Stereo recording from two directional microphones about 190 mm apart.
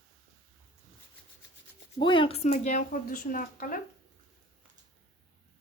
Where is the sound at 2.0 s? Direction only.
25° left (ahead or behind); by 3.7 s 45° left (ahead or behind).